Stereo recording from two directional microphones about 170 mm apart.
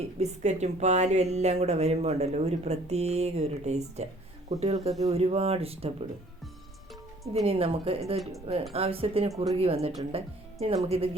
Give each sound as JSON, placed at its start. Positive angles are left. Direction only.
{"t": 0.2, "sound": "speech", "side_deg": -40}
{"t": 7.4, "sound": "speech", "side_deg": -35}